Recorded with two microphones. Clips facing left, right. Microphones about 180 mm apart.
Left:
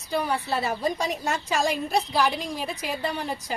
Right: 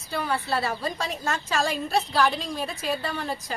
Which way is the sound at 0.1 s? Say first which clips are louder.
Left 1 dB; 15° left (ahead or behind).